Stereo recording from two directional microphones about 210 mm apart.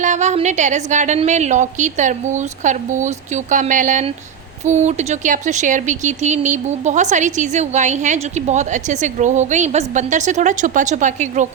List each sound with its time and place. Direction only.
0.0 s speech: 35° right (ahead or behind)